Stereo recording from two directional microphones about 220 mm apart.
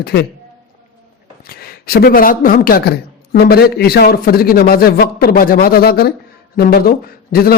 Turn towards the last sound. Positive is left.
turn(degrees=45)  # may be behind; listen again after turning